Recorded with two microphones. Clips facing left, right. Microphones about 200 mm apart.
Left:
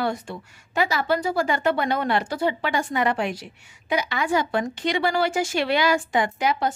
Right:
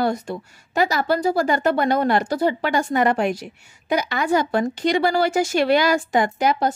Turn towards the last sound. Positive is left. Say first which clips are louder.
# right 3 dB
turn(degrees=-40)  # may be behind; listen again after turning